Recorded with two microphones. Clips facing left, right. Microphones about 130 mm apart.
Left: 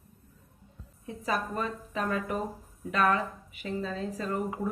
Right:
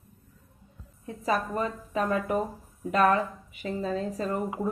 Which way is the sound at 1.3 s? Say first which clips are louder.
Right 3 dB; 30° right (ahead or behind).